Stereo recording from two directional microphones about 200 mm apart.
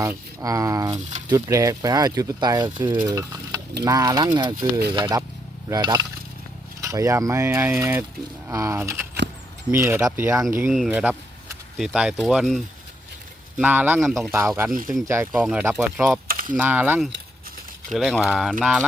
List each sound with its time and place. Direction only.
0.0 s speech: 15° right (ahead or behind)
3.1 s stir: 20° right (ahead or behind)
3.8 s speech: 20° right (ahead or behind); by 14.3 s centre (ahead or behind)
14.3 s speech: 15° right (ahead or behind)
16.2 s mechanisms: 45° right (ahead or behind)
16.6 s speech: 10° right (ahead or behind)